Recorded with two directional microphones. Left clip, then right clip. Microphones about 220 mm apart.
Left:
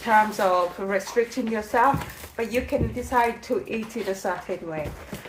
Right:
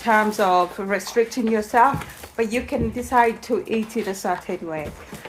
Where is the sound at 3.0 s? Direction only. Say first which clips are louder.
Right 5 dB; 45° right (ahead or behind).